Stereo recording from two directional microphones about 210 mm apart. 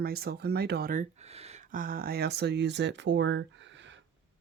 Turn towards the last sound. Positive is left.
turn(degrees=-60)  # may be behind; listen again after turning